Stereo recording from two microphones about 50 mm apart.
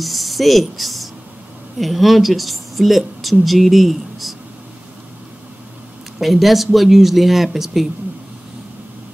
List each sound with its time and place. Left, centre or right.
0.0 s speech: centre
6.1 s speech: centre